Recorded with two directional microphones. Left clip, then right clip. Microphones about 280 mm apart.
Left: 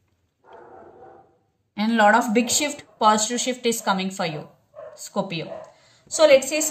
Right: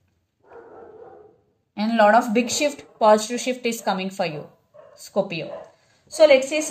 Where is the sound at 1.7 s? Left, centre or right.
Centre.